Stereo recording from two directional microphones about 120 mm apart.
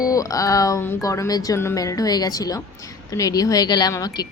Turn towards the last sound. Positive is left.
turn(degrees=30)  # may be behind; listen again after turning